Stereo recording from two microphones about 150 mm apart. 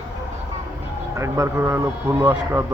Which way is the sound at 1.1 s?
20° right (ahead or behind).